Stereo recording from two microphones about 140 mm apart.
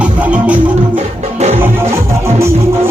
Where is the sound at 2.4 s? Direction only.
20° right (ahead or behind).